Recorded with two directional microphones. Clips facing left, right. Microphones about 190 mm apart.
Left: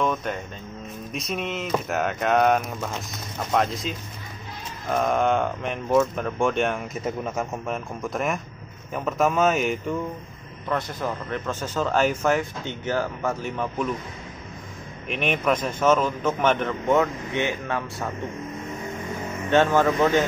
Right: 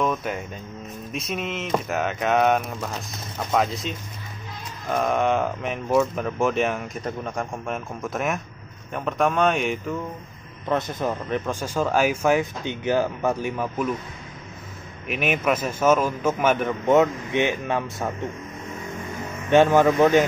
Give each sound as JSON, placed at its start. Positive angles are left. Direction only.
{"t": 0.0, "sound": "speech", "side_deg": -5}
{"t": 10.7, "sound": "speech", "side_deg": -20}
{"t": 15.0, "sound": "speech", "side_deg": -5}
{"t": 16.9, "sound": "speech", "side_deg": -20}
{"t": 19.5, "sound": "speech", "side_deg": -15}